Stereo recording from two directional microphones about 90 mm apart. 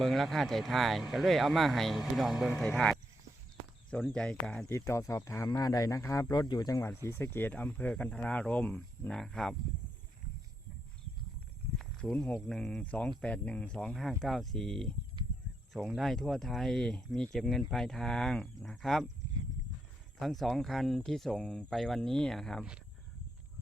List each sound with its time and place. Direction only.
0.0 s speech: centre (ahead or behind)
2.5 s speech: 10° left (ahead or behind)
4.1 s speech: 10° left (ahead or behind)
4.7 s speech: 35° left (ahead or behind)
5.5 s speech: 45° left (ahead or behind)
6.3 s speech: 50° left (ahead or behind)
6.8 s speech: 30° left (ahead or behind); by 9.6 s 5° left (ahead or behind)
11.8 s a sound: 5° left (ahead or behind)
12.2 s speech: 5° left (ahead or behind)
20.1 s speech: centre (ahead or behind)